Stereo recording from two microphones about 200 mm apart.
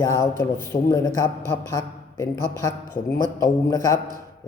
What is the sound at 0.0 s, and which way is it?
A man's voice, 15° left (ahead or behind).